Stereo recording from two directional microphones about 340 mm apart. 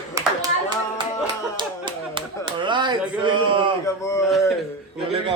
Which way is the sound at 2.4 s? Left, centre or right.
Centre.